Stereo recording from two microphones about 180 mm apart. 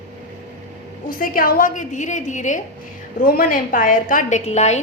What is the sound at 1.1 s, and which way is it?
A woman's voice, 50° left (ahead or behind).